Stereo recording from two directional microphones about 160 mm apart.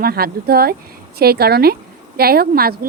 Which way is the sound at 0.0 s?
75° right (ahead or behind).